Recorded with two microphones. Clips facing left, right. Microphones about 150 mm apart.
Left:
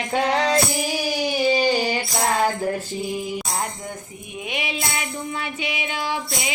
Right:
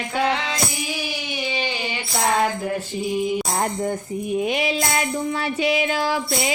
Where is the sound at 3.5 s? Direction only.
40° right (ahead or behind).